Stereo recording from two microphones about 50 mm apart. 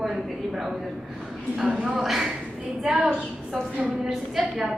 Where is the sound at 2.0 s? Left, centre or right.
Centre.